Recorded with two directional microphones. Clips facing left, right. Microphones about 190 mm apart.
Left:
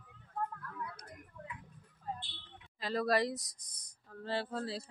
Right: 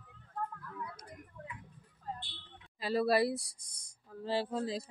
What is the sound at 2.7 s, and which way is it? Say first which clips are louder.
Speech: right 3 dB; 10° right (ahead or behind).